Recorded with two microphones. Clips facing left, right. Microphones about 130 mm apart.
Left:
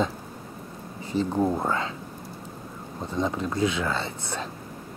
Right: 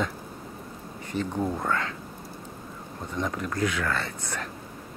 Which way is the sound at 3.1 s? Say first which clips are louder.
Left 3 dB; 25° left (ahead or behind).